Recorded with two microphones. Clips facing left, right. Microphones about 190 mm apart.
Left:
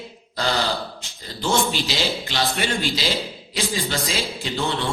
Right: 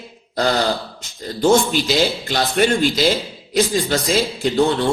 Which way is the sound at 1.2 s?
45° right (ahead or behind).